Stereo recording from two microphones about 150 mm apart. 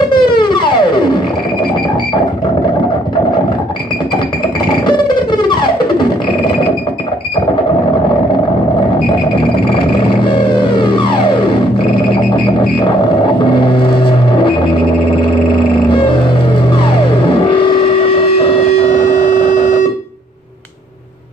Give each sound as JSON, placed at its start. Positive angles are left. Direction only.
{"t": 0.1, "sound": "music", "side_deg": 30}
{"t": 4.8, "sound": "guitar", "side_deg": 30}
{"t": 9.8, "sound": "music", "side_deg": 35}
{"t": 12.4, "sound": "a sound", "side_deg": 35}
{"t": 17.3, "sound": "music", "side_deg": 35}